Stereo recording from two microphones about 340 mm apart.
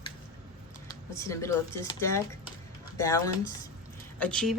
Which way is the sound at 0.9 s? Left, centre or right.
Centre.